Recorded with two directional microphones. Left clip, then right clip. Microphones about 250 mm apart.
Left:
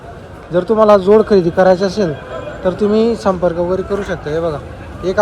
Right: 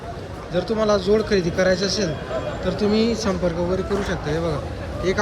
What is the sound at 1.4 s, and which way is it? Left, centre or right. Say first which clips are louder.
Speech: left 9 dB; centre.